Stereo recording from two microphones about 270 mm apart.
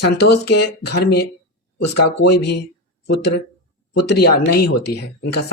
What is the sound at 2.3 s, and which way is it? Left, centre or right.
Speech, left.